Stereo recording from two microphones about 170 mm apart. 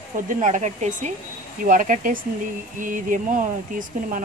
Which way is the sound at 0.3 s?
45° right (ahead or behind).